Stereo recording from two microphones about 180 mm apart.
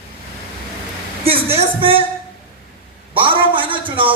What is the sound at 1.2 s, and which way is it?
Speech, 30° right (ahead or behind).